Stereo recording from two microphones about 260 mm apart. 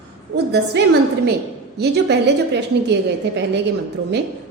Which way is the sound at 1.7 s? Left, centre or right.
Right.